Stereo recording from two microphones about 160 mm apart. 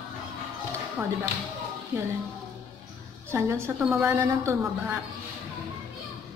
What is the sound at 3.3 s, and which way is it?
A man's voice, 15° right (ahead or behind).